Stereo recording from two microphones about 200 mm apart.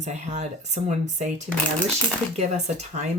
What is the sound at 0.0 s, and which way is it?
Speech, 35° right (ahead or behind).